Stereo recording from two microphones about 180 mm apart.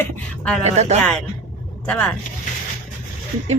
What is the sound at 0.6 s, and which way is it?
Speech, 35° right (ahead or behind).